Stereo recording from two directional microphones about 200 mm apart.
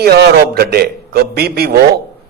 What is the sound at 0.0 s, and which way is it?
A man's voice, 55° right (ahead or behind).